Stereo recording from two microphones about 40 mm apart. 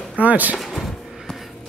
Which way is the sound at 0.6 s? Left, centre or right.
Centre.